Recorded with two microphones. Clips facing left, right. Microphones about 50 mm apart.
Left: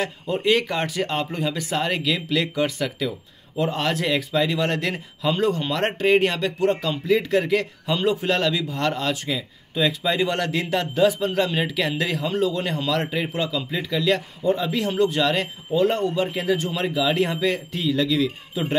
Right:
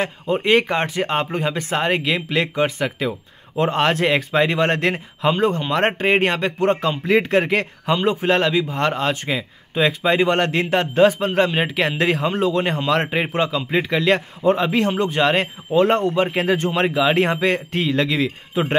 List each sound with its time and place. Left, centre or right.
0.0 s a man's voice: right
3.5 s a man's voice: right
14.4 s a man's voice: right
14.7 s a man's voice: right
15.7 s a man's voice: right
16.2 s speech: right